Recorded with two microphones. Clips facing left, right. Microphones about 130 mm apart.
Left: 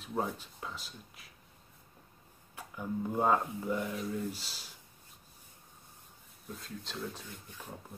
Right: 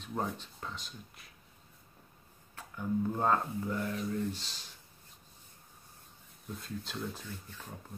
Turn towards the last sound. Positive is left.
turn(degrees=15)  # may be behind; listen again after turning